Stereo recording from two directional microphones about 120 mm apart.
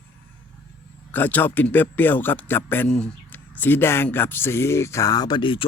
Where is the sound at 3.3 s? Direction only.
15° left (ahead or behind).